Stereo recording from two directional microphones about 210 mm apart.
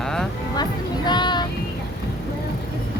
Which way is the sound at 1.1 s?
20° left (ahead or behind).